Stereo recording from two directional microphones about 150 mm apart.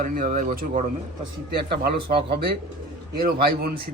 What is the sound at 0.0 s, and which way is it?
Speech, 65° right (ahead or behind).